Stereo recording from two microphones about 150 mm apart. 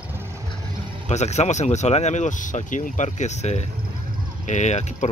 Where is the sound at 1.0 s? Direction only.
50° left (ahead or behind).